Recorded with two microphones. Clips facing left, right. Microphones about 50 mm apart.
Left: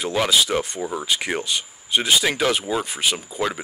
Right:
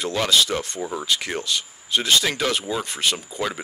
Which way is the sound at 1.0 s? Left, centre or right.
Centre.